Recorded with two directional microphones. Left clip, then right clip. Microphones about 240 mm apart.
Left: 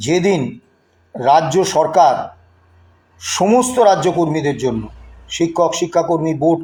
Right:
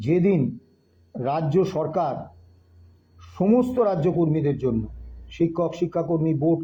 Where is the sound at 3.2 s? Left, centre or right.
Left.